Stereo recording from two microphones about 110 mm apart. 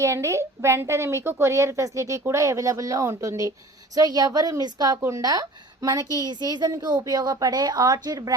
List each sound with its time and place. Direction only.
0.0 s a woman's voice: 25° right (ahead or behind)